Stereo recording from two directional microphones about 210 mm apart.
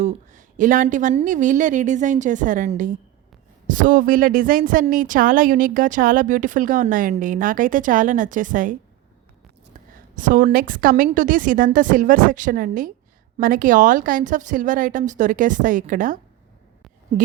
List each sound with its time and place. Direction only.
0.0 s a woman's voice: 35° right (ahead or behind)
10.2 s a woman's voice: 40° right (ahead or behind)